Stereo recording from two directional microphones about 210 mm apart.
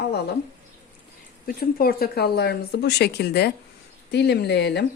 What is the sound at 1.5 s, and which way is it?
Speech, 45° left (ahead or behind).